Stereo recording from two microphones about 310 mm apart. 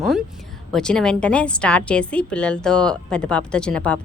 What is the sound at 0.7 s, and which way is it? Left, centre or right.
A woman's voice, centre.